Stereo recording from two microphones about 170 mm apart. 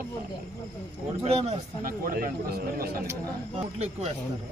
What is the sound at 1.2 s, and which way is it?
Speech, 40° right (ahead or behind).